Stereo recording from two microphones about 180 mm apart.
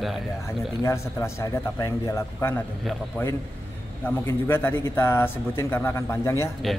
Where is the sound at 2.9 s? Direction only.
Centre (ahead or behind).